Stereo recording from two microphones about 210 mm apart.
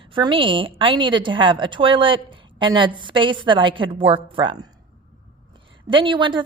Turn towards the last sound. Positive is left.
turn(degrees=-25)  # may be behind; listen again after turning